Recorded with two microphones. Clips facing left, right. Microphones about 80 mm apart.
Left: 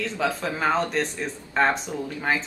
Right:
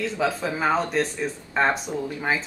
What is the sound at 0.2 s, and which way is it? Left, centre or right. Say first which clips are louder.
Speech: even; centre.